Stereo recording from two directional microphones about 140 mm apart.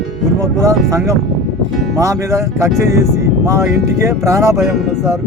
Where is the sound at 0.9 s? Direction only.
20° right (ahead or behind).